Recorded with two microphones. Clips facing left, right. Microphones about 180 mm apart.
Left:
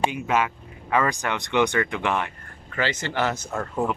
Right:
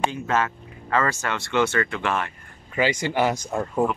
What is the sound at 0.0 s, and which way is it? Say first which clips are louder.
Speech: left 1 dB; 15° left (ahead or behind).